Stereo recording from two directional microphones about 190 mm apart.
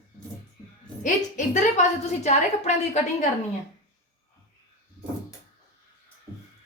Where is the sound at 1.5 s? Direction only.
40° left (ahead or behind).